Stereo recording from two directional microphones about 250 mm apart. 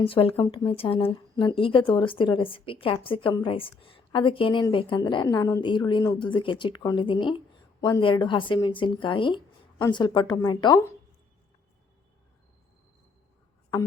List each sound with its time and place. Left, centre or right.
0.0 s a woman's voice: left